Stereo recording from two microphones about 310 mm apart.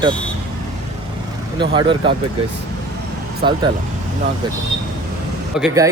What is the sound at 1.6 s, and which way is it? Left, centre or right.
Speech, centre.